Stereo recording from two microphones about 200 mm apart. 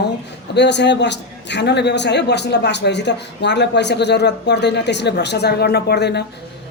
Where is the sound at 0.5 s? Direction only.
60° left (ahead or behind).